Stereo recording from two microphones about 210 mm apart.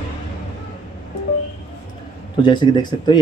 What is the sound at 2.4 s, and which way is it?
Speech, 20° left (ahead or behind).